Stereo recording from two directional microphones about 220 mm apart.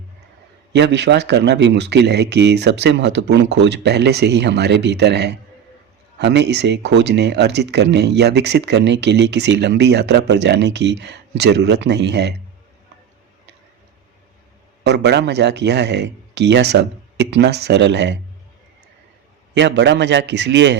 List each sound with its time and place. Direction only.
0.7 s speech: 50° right (ahead or behind)
14.8 s speech: 50° right (ahead or behind)
19.5 s speech: 55° right (ahead or behind)